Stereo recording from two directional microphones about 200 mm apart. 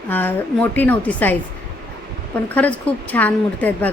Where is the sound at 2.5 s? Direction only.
5° left (ahead or behind).